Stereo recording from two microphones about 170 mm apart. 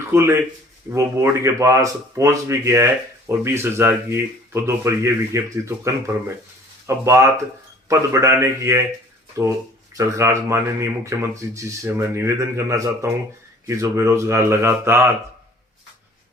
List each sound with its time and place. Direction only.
0.1 s speech: 15° right (ahead or behind)